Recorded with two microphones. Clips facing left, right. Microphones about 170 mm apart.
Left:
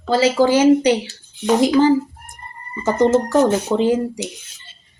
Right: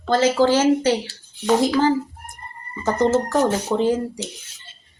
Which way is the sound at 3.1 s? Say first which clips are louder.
Left 4 dB; 20° left (ahead or behind).